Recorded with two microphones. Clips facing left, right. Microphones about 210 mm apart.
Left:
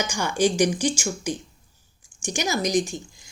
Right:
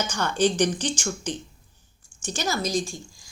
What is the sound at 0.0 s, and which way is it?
A woman's voice, 10° left (ahead or behind).